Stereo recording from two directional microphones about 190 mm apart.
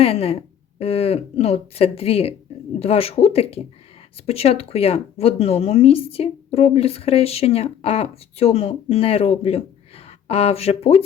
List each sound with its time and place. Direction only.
0.0 s speech: 30° left (ahead or behind)